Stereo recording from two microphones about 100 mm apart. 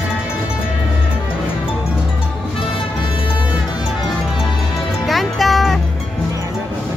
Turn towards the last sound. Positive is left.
turn(degrees=0)  # may be behind; listen again after turning